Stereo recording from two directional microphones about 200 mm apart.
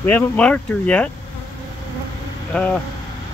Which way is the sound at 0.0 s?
10° left (ahead or behind).